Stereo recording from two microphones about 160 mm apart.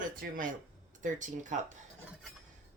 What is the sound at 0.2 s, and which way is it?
Speech, 55° right (ahead or behind).